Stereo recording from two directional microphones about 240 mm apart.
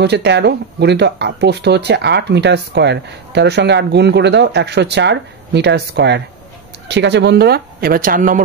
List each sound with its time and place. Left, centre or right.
0.0 s speech: right